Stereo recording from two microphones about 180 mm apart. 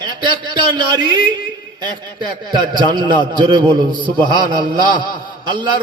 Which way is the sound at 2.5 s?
25° right (ahead or behind).